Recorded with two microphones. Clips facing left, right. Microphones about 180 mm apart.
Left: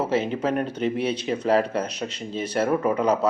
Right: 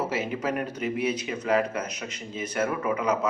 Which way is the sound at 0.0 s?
30° left (ahead or behind).